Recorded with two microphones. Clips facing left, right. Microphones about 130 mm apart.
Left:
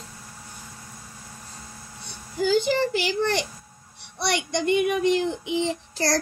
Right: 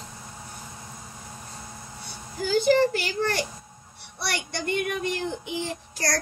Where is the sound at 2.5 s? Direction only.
45° right (ahead or behind).